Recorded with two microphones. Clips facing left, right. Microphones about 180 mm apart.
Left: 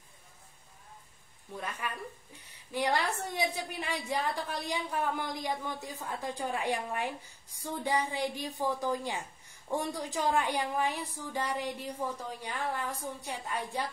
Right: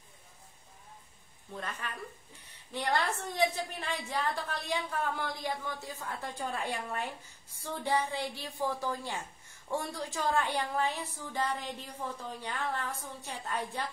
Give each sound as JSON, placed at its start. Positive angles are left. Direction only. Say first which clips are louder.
{"t": 1.6, "sound": "a woman's voice", "louder": "left 2 dB", "side_deg": 10}